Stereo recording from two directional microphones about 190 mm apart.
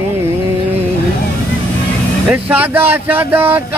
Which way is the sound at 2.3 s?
10° right (ahead or behind).